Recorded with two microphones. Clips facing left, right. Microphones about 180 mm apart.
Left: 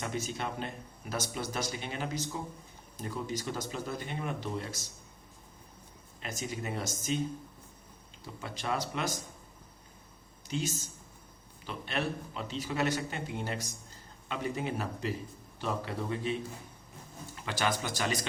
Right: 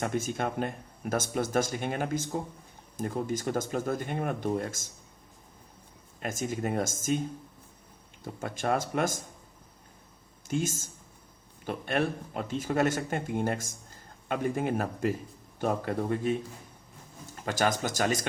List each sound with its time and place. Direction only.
0.0 s speech: 50° right (ahead or behind)
6.1 s speech: 50° right (ahead or behind)
8.2 s speech: 50° right (ahead or behind)
10.5 s speech: 50° right (ahead or behind)